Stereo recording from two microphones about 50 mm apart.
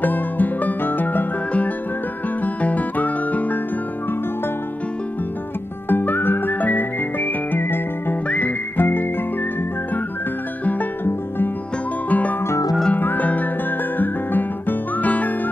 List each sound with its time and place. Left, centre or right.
0.0 s music: left
2.4 s music: left
5.9 s music: left
10.6 s neigh: left
11.1 s music: left
12.1 s music: left